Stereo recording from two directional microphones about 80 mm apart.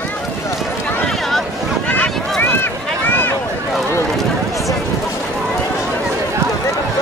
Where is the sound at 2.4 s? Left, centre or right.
Left.